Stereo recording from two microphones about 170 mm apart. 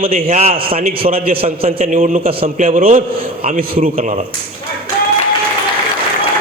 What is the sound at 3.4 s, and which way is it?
Speech, 55° right (ahead or behind).